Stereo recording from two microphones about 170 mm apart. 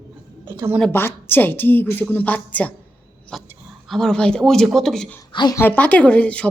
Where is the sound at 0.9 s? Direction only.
15° left (ahead or behind).